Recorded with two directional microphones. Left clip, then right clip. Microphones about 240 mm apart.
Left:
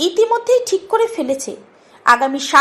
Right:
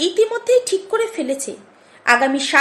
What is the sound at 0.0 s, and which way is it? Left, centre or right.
Speech, centre.